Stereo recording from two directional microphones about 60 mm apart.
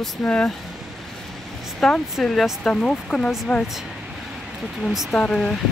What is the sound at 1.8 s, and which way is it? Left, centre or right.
Speech, centre.